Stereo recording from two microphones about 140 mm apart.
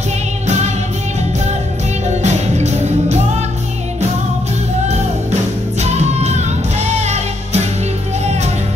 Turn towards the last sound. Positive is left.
turn(degrees=-50)  # may be behind; listen again after turning